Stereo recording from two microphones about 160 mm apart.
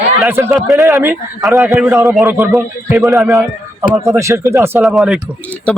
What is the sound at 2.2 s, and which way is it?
Speech, 20° right (ahead or behind).